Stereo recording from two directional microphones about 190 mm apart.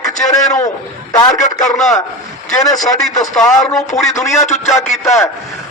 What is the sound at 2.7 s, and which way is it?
Speech, 40° left (ahead or behind).